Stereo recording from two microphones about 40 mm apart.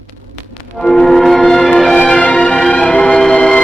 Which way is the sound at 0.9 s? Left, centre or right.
Centre.